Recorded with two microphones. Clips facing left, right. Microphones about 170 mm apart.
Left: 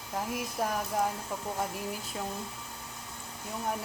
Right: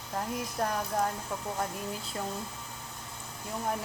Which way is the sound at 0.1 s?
5° left (ahead or behind).